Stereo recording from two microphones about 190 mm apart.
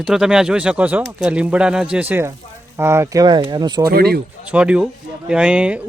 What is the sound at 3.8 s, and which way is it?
Speech, 55° right (ahead or behind).